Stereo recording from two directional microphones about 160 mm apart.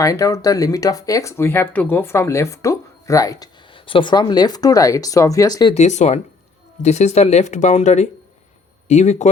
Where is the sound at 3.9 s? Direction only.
30° left (ahead or behind).